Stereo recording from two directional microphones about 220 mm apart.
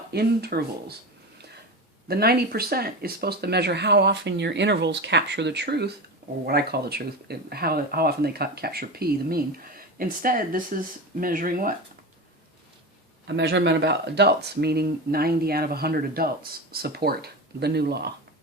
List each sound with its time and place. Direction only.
0.1 s speech: 45° right (ahead or behind)
2.0 s speech: 45° right (ahead or behind)
13.2 s speech: 50° right (ahead or behind)